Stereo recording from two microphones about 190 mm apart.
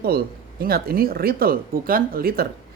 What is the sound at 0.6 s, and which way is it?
Speech, 50° right (ahead or behind).